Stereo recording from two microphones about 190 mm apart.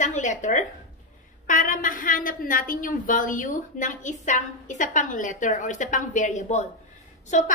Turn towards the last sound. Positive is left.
turn(degrees=40)  # may be behind; listen again after turning